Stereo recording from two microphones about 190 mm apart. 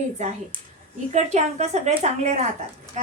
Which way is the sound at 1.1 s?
35° right (ahead or behind).